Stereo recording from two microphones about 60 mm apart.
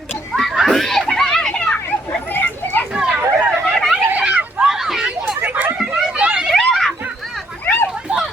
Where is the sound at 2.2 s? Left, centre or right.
Left.